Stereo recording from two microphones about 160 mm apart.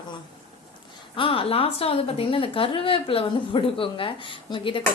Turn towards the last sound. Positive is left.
turn(degrees=30)  # may be behind; listen again after turning